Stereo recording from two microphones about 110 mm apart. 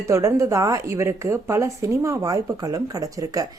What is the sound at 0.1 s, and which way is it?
Speech, 30° right (ahead or behind).